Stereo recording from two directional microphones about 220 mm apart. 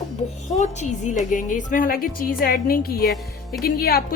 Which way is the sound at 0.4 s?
30° left (ahead or behind).